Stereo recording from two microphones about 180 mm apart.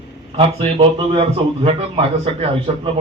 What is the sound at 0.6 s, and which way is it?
A man's voice, 30° right (ahead or behind).